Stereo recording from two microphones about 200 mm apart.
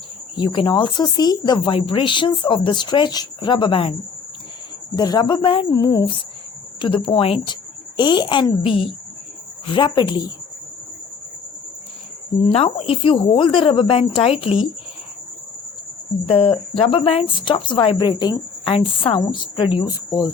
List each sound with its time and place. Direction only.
0.3 s speech: 25° left (ahead or behind)
4.9 s speech: 20° left (ahead or behind)
12.5 s speech: 30° left (ahead or behind)
16.2 s speech: 30° left (ahead or behind)